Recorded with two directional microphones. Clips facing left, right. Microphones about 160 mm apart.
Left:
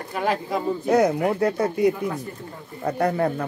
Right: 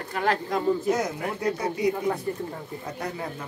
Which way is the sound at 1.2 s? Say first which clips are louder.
Left 6 dB; 55° left (ahead or behind).